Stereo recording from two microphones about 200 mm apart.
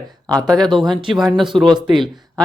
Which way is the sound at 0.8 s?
25° right (ahead or behind).